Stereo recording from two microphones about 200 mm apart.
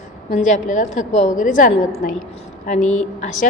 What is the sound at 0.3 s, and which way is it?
A woman's voice, 35° left (ahead or behind).